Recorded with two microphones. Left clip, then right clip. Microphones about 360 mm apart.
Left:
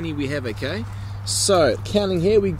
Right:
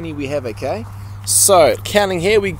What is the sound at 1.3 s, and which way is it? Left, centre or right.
Speech, centre.